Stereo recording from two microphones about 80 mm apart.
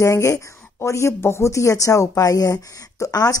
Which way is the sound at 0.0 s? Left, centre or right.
Left.